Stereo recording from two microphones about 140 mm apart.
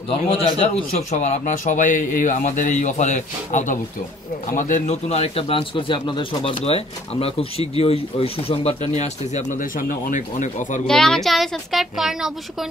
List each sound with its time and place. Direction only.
0.1 s a man's voice: 45° left (ahead or behind); by 10.8 s 65° left (ahead or behind)
10.9 s a woman's voice: 5° left (ahead or behind)